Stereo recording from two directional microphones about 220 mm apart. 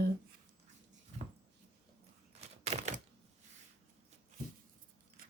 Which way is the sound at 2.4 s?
30° right (ahead or behind).